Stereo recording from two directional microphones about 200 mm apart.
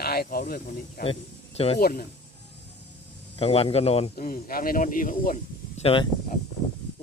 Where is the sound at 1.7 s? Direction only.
50° left (ahead or behind).